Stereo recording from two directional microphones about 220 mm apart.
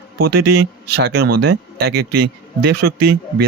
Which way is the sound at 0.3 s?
45° right (ahead or behind).